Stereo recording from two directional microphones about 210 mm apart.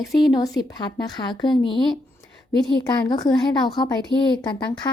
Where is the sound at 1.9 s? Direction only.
5° left (ahead or behind).